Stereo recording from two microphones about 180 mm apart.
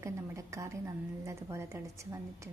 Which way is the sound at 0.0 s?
15° right (ahead or behind).